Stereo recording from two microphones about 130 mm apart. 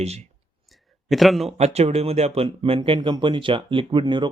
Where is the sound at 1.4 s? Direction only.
55° right (ahead or behind).